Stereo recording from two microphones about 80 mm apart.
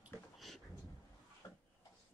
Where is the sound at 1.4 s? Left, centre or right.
Left.